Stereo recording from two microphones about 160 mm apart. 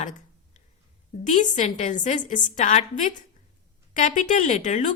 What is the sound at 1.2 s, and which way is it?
A woman's voice, 50° left (ahead or behind).